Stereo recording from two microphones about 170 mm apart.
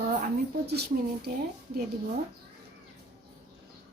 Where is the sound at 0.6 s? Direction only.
70° right (ahead or behind).